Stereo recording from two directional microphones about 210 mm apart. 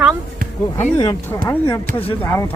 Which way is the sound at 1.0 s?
20° left (ahead or behind).